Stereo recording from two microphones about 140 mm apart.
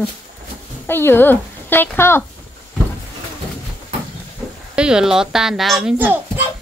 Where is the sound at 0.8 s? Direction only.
15° left (ahead or behind).